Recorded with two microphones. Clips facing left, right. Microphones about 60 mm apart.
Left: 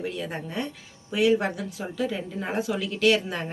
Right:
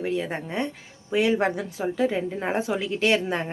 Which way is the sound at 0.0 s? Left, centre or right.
Right.